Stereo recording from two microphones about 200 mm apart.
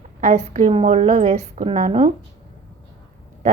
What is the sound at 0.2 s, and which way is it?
A woman's voice, 35° right (ahead or behind).